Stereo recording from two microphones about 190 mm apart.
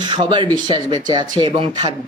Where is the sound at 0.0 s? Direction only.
25° right (ahead or behind).